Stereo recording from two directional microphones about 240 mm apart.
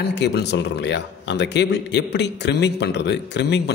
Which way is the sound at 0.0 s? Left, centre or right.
Left.